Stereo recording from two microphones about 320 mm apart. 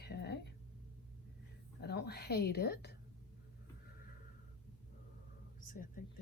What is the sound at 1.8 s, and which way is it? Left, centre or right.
A woman's voice, left.